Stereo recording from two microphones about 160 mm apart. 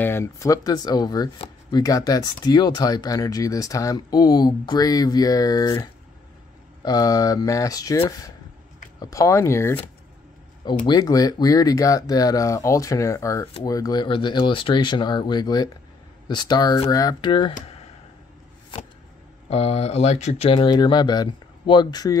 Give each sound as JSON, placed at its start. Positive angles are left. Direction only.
{"t": 0.0, "sound": "speech", "side_deg": 15}
{"t": 9.0, "sound": "speech", "side_deg": 20}
{"t": 10.9, "sound": "speech", "side_deg": 25}
{"t": 19.5, "sound": "speech", "side_deg": 40}